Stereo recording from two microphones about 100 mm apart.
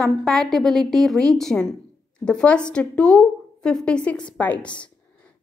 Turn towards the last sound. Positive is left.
turn(degrees=10)  # may be behind; listen again after turning